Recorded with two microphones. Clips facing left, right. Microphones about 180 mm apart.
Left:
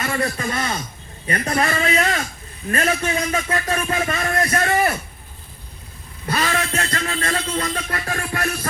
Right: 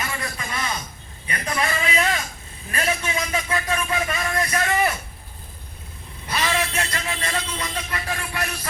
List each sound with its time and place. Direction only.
0.2 s a man's voice: 40° left (ahead or behind)
6.3 s a man's voice: 50° left (ahead or behind)